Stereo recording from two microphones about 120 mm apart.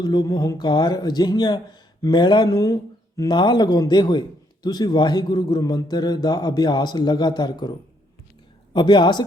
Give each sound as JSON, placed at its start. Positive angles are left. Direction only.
{"t": 0.0, "sound": "a man's voice", "side_deg": 35}